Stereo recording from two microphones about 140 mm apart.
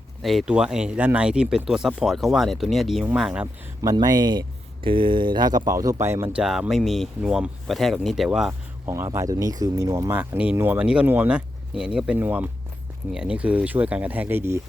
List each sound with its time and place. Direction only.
0.2 s speech: centre (ahead or behind)
3.4 s speech: 25° right (ahead or behind)
6.4 s speech: 5° right (ahead or behind)
8.9 s speech: 20° right (ahead or behind)
10.2 s speech: 10° right (ahead or behind)